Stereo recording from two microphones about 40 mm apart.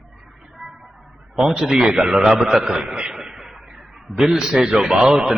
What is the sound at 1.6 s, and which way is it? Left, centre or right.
A man's voice, centre.